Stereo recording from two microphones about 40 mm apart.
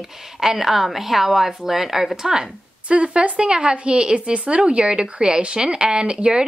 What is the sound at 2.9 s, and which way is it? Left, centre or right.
Speech, right.